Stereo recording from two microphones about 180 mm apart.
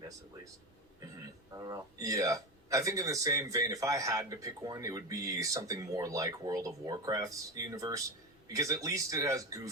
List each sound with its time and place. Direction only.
1.5 s speech: 20° right (ahead or behind)